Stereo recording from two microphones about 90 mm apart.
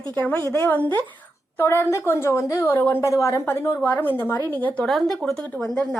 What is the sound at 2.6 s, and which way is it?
A woman's voice, 20° left (ahead or behind).